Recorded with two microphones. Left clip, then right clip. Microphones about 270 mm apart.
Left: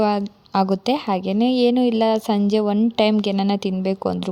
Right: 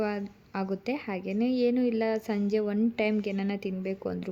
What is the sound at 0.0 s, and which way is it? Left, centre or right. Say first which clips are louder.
A woman's voice: left 12 dB; left.